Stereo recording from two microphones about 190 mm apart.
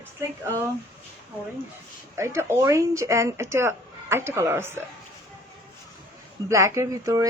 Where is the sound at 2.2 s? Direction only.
15° right (ahead or behind).